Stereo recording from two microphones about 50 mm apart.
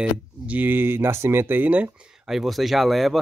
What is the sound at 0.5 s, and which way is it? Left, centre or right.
Speech, right.